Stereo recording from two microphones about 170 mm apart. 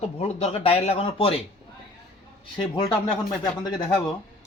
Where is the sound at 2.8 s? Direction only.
25° left (ahead or behind).